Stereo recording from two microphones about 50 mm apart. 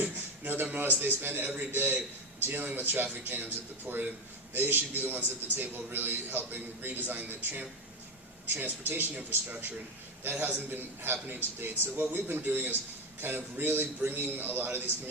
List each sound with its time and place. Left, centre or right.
0.0 s a man's voice: right